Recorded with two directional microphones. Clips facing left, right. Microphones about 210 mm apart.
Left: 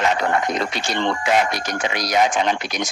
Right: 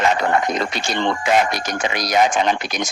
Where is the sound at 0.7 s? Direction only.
45° right (ahead or behind).